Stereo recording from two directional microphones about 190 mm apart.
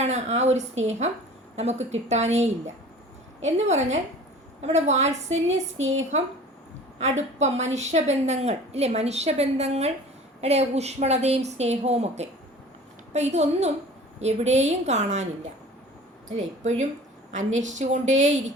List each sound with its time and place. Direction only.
0.0 s a woman's voice: 35° right (ahead or behind)
5.7 s speech: 90° right
7.3 s a woman's voice: 35° right (ahead or behind)
17.6 s a woman's voice: 40° right (ahead or behind)